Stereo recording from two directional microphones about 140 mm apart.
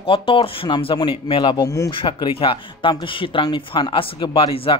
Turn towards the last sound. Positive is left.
turn(degrees=40)  # may be behind; listen again after turning